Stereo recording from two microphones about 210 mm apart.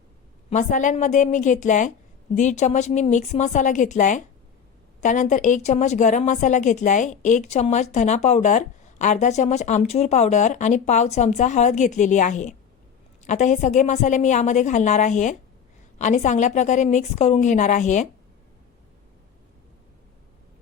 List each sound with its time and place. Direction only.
0.5 s a woman's voice: 35° left (ahead or behind)